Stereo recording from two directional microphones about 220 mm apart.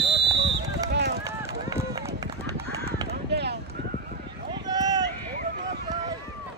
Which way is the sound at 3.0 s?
50° right (ahead or behind).